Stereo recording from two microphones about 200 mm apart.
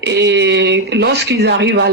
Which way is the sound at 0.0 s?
60° right (ahead or behind).